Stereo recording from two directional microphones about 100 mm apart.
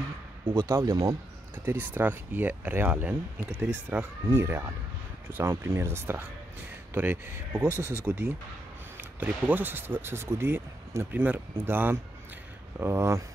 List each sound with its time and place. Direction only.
0.7 s speech: 30° right (ahead or behind)
1.5 s speech: 20° right (ahead or behind)
4.3 s speech: 30° right (ahead or behind)